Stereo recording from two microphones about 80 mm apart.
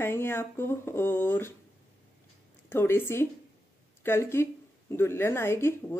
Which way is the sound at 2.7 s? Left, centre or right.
Left.